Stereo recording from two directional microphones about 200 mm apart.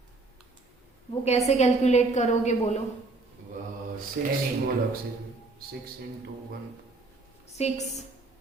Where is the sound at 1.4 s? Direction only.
35° left (ahead or behind).